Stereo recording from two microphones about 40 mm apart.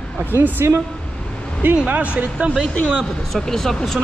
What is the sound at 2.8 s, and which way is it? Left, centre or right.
Speech, centre.